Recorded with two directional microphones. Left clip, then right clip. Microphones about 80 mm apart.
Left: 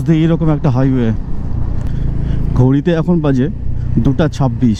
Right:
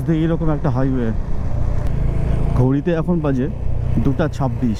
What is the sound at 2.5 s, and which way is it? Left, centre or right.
Speech, centre.